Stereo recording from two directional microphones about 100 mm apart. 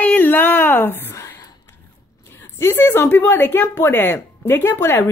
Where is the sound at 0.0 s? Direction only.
20° left (ahead or behind).